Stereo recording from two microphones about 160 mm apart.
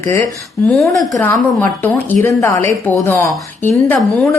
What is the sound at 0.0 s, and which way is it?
Speech, 20° left (ahead or behind).